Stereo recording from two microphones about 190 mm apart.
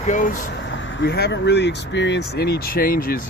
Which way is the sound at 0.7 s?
75° left (ahead or behind).